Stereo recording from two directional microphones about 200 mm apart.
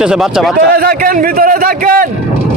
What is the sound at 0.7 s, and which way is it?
A man's voice, 50° right (ahead or behind).